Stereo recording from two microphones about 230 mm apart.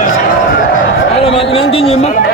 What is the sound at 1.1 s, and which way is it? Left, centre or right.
Chatter, left.